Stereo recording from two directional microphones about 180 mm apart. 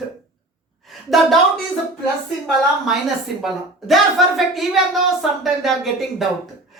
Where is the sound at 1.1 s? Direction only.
Centre (ahead or behind).